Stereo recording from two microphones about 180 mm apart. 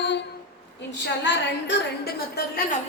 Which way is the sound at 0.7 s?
75° left (ahead or behind).